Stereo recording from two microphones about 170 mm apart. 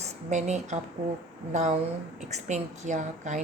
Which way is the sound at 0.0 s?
45° right (ahead or behind).